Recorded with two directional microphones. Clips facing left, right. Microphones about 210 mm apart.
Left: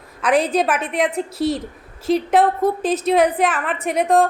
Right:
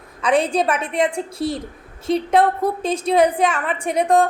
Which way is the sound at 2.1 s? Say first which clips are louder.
Even; centre (ahead or behind).